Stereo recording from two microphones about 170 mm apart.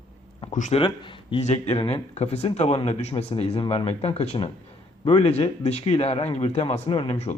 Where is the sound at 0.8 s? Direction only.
30° left (ahead or behind).